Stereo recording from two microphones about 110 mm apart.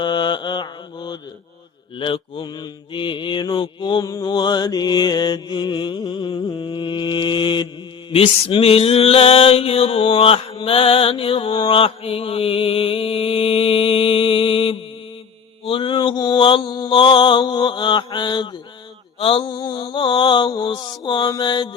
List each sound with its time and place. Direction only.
0.0 s mantra: 45° left (ahead or behind)
2.0 s mantra: 50° left (ahead or behind)
4.0 s mantra: 35° left (ahead or behind)
19.2 s mantra: 55° left (ahead or behind)